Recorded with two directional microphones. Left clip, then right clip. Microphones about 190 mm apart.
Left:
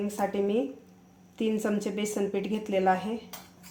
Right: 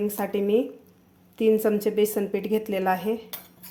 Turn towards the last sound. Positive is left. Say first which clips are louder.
# right 1 dB
turn(degrees=-30)  # may be behind; listen again after turning